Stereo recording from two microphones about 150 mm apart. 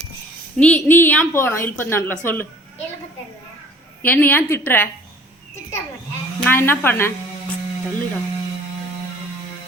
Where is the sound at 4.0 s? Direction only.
10° left (ahead or behind).